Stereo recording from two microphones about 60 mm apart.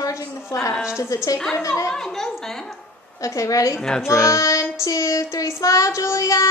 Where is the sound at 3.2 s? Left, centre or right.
Left.